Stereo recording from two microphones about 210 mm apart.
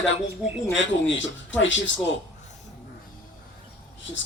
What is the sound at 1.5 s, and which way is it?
Speech, 60° left (ahead or behind).